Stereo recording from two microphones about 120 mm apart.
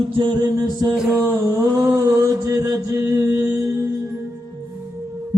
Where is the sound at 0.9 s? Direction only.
5° right (ahead or behind).